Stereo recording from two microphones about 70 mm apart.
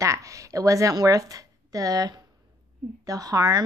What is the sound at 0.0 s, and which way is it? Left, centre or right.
A woman's voice, right.